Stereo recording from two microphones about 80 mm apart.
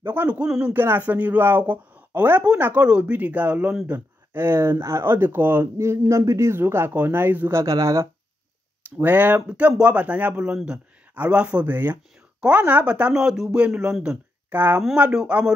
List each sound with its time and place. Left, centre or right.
0.0 s a man's voice: right
0.7 s a woman's voice: right
3.8 s a sound: centre
4.4 s speech: right
7.6 s speech: right
8.9 s a woman's voice: right
14.5 s a man's voice: right